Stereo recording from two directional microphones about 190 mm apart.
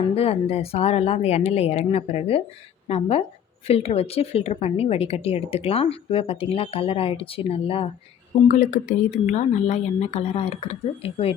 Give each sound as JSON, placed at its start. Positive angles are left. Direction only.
{"t": 0.1, "sound": "a woman's voice", "side_deg": 30}
{"t": 8.4, "sound": "a woman's voice", "side_deg": 40}